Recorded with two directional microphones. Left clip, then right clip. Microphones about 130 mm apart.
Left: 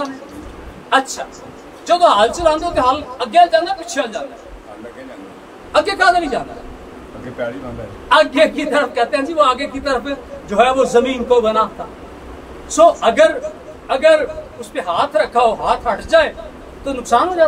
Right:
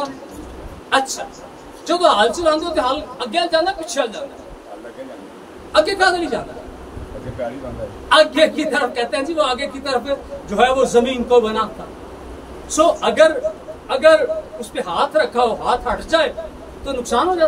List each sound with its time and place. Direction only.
0.8 s a woman's voice: 10° left (ahead or behind)
5.7 s a woman's voice: 10° left (ahead or behind)
7.4 s speech: 55° left (ahead or behind)
8.1 s a woman's voice: 10° left (ahead or behind)
12.7 s a woman's voice: 10° left (ahead or behind)